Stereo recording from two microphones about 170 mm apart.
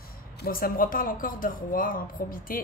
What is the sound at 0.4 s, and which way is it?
A woman's voice, 60° left (ahead or behind).